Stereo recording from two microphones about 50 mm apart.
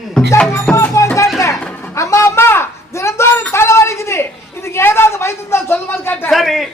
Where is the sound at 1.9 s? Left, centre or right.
Left.